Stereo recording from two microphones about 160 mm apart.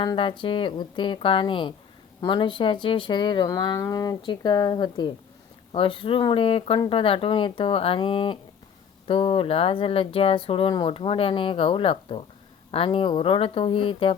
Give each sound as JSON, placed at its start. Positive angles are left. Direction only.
{"t": 0.0, "sound": "speech", "side_deg": 30}